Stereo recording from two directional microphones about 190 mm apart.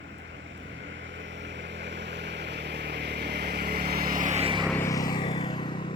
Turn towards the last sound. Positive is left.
turn(degrees=25)  # may be behind; listen again after turning